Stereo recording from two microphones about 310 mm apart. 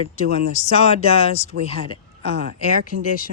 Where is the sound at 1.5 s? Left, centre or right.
Right.